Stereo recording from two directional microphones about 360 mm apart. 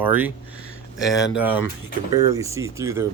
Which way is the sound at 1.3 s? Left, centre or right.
Centre.